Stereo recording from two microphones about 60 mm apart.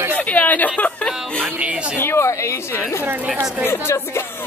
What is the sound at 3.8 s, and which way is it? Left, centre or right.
Speech, left.